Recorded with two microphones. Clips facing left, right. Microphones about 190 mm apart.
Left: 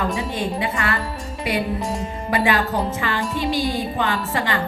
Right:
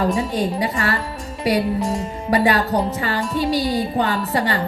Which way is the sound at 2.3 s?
35° right (ahead or behind).